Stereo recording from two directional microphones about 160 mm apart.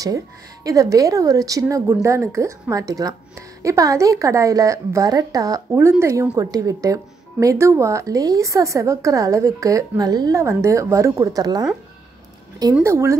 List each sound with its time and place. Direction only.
0.7 s speech: 20° right (ahead or behind)
12.8 s speech: 15° right (ahead or behind)